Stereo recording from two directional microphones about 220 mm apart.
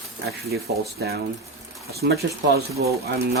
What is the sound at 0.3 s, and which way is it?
Speech, 45° right (ahead or behind).